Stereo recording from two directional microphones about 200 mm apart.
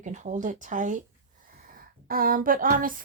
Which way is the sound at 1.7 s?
45° right (ahead or behind).